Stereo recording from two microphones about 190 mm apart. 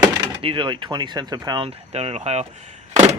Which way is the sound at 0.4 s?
25° right (ahead or behind).